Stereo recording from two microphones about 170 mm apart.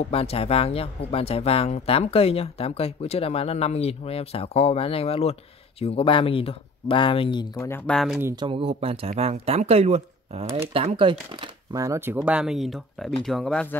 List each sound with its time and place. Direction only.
0.1 s speech: 35° left (ahead or behind); by 8.2 s 5° left (ahead or behind)
8.2 s speech: 15° right (ahead or behind)
8.5 s speech: 35° right (ahead or behind)
11.7 s speech: 20° right (ahead or behind); by 13.7 s 5° left (ahead or behind)